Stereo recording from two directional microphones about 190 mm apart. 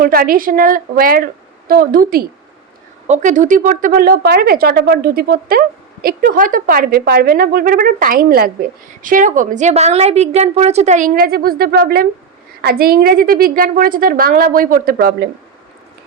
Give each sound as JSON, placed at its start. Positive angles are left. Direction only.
{"t": 0.0, "sound": "a woman's voice", "side_deg": -50}